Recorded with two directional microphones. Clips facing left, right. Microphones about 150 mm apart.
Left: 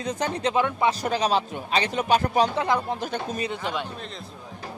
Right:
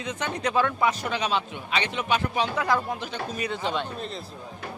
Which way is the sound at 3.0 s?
45° left (ahead or behind).